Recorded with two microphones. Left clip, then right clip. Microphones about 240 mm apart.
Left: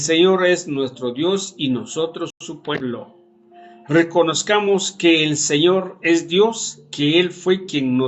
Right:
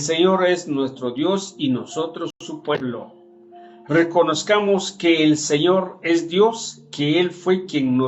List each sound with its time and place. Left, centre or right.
0.0 s speech: left
3.8 s speech: left